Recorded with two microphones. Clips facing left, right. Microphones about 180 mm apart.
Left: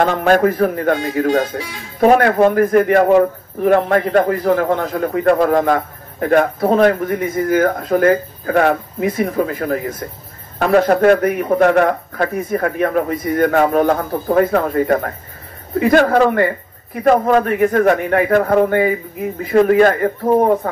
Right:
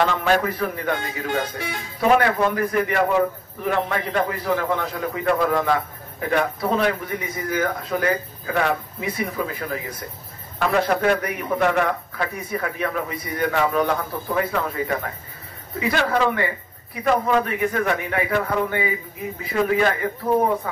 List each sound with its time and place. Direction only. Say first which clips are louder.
0.0 s a man's voice: left 7 dB; 50° left (ahead or behind)